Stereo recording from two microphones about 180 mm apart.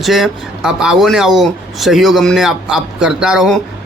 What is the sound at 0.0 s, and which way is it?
Speech, centre (ahead or behind).